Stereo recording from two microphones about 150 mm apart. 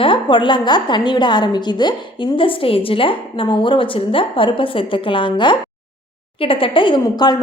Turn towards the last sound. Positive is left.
turn(degrees=30)  # may be behind; listen again after turning